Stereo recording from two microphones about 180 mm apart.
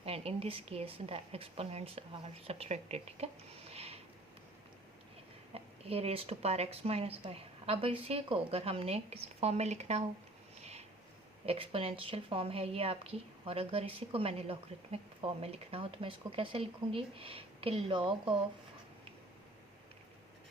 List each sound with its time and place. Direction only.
0.0 s speech: 35° right (ahead or behind)
3.7 s a sound: 35° right (ahead or behind)
5.5 s speech: 35° right (ahead or behind)
11.4 s speech: 30° right (ahead or behind)